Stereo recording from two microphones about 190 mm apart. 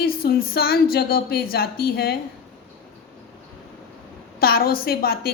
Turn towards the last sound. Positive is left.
turn(degrees=50)  # may be behind; listen again after turning